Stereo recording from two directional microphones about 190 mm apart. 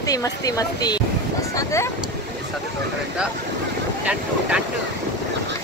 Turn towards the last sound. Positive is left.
turn(degrees=-5)  # may be behind; listen again after turning